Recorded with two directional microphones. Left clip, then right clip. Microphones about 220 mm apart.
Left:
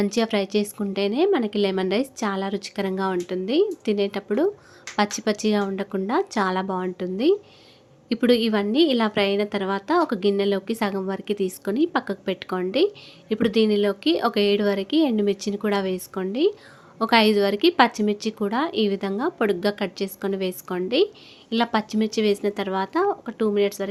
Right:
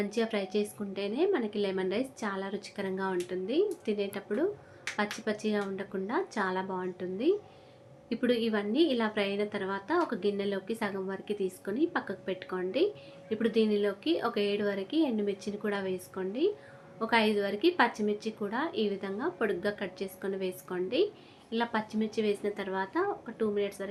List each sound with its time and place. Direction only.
0.0 s a woman's voice: 50° left (ahead or behind)